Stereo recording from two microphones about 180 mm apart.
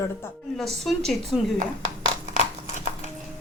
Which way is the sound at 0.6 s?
Centre (ahead or behind).